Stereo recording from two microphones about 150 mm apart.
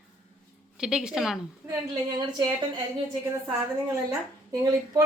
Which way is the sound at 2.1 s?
30° right (ahead or behind).